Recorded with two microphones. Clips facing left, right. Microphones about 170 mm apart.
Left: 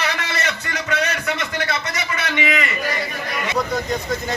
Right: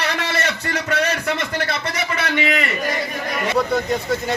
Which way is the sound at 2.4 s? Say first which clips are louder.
Even; 35° right (ahead or behind).